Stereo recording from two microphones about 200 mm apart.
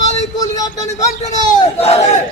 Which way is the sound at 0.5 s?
15° left (ahead or behind).